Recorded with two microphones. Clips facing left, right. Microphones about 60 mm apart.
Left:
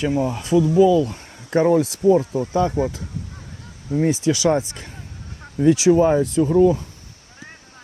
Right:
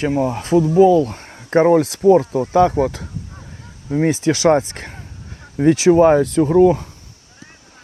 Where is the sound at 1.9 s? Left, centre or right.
Right.